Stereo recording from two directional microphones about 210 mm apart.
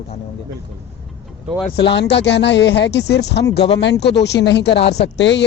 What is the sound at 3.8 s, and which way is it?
Speech, 55° left (ahead or behind).